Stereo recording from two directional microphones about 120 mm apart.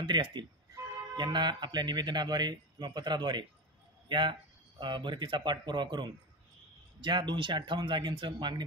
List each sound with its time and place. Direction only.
0.0 s speech: 40° right (ahead or behind)